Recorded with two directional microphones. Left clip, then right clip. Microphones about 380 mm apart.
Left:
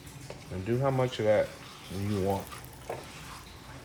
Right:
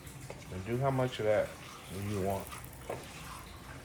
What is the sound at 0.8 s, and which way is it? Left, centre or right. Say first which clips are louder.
Speech: left 3 dB; left.